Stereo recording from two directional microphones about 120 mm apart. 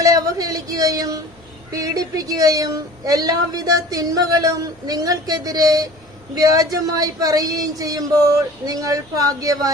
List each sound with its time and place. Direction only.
0.0 s speech: 30° right (ahead or behind)